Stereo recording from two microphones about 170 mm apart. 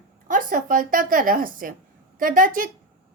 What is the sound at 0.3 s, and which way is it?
A woman's voice, 55° right (ahead or behind).